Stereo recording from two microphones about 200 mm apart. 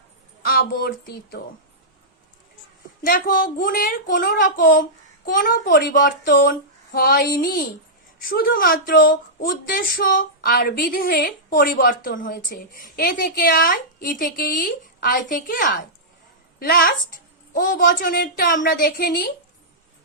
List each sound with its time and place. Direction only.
0.7 s speech: 45° left (ahead or behind)
3.0 s speech: 45° left (ahead or behind)